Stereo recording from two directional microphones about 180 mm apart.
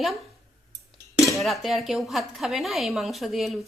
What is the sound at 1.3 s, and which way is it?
Dishes, centre (ahead or behind).